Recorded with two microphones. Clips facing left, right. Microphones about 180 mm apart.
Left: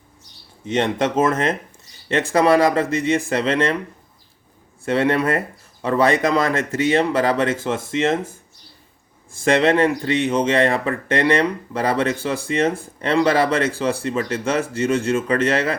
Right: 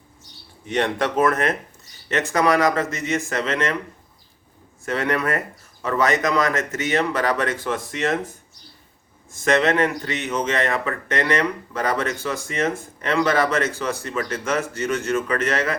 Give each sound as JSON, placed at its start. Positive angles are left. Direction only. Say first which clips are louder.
{"t": 0.6, "sound": "speech", "louder": "left 2 dB", "side_deg": 25}
{"t": 4.9, "sound": "speech", "louder": "left 4 dB", "side_deg": 30}
{"t": 9.3, "sound": "speech", "louder": "left 3 dB", "side_deg": 30}